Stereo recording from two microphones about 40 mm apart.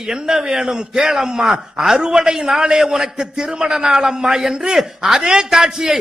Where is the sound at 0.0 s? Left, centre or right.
Centre.